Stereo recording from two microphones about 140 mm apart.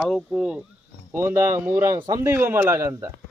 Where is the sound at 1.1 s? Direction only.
20° right (ahead or behind).